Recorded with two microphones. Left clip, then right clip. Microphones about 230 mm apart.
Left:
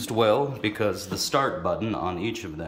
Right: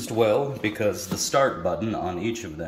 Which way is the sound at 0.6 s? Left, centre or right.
Left.